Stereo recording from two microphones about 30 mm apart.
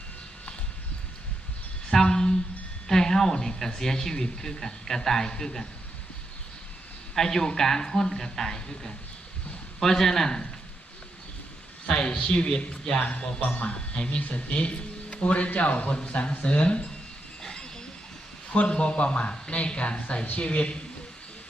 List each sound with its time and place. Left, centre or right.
2.0 s a sound: left
2.8 s speech: centre
7.2 s speech: centre
11.9 s speech: left
13.1 s speech: left
17.4 s train: left
18.7 s speech: left